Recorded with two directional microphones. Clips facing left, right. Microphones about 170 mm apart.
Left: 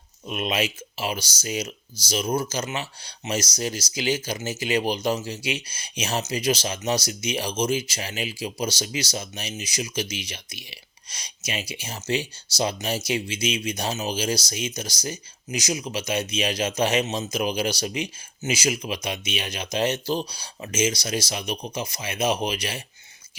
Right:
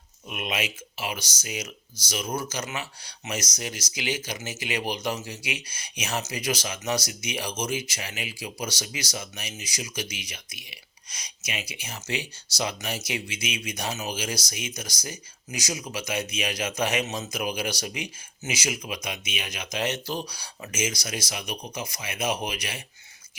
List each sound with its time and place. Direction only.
0.3 s speech: 30° left (ahead or behind)